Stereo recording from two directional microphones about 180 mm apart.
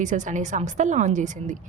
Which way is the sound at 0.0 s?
45° right (ahead or behind).